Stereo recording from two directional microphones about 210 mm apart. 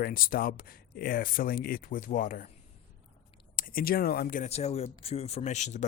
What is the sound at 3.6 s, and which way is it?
Speech, 40° left (ahead or behind).